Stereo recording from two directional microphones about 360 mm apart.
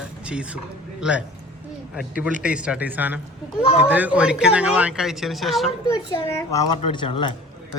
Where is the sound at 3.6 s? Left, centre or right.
Centre.